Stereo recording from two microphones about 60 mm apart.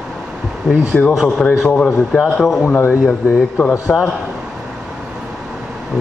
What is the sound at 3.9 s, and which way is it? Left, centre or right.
Speech, centre.